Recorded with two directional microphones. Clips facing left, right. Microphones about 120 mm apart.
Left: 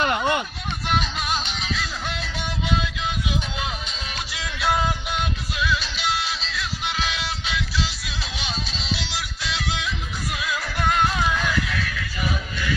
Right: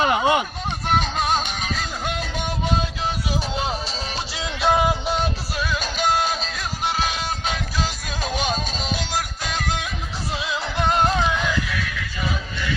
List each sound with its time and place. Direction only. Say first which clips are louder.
0.0 s speech: right 3 dB; 15° right (ahead or behind)
0.8 s music: right 4 dB; 45° right (ahead or behind)
4.3 s music: right 4 dB; 25° right (ahead or behind)
5.1 s music: right 4 dB; 40° right (ahead or behind)
10.3 s music: right 3 dB; 25° right (ahead or behind)
11.0 s music: right 3 dB; 40° right (ahead or behind)
11.2 s music: right 1 dB; 15° right (ahead or behind)